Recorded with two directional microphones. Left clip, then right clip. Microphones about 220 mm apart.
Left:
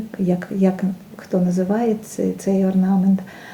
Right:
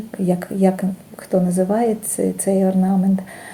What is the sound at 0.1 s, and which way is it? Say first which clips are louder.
Speech: right 2 dB; 30° right (ahead or behind).